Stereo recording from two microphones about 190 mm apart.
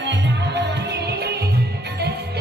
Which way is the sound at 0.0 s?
65° right (ahead or behind).